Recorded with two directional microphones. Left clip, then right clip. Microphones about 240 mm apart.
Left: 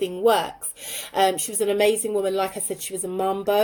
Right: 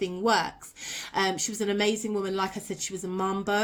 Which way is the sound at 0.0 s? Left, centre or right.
Centre.